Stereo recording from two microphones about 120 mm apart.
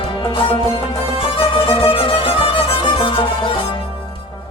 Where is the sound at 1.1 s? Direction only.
45° left (ahead or behind).